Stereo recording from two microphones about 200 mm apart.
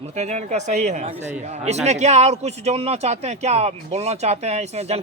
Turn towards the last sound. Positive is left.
turn(degrees=-35)  # may be behind; listen again after turning